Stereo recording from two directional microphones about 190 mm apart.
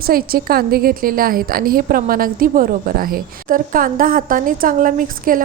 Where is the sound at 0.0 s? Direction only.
50° right (ahead or behind).